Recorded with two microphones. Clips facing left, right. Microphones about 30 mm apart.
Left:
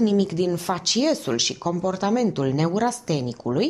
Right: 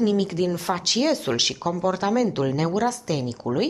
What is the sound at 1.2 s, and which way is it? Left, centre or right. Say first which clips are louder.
Speech: right 1 dB; centre.